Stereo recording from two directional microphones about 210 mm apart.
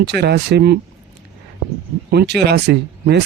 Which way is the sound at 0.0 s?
50° right (ahead or behind).